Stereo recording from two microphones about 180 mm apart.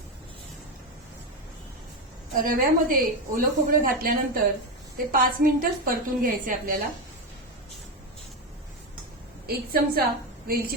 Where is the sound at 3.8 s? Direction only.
55° right (ahead or behind).